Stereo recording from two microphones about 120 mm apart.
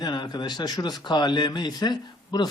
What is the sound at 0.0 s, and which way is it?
Speech, 35° left (ahead or behind).